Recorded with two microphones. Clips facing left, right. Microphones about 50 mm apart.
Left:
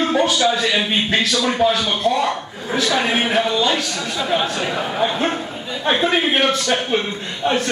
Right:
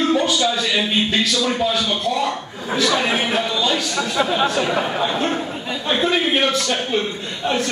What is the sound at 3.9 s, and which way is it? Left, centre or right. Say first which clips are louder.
Speech: right 1 dB; right.